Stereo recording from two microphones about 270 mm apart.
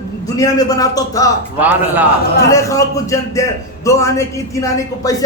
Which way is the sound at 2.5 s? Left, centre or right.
Centre.